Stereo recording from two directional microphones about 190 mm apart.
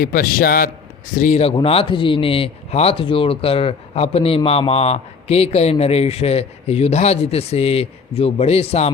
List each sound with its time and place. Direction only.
0.0 s a man's voice: 50° left (ahead or behind); by 8.9 s 35° left (ahead or behind)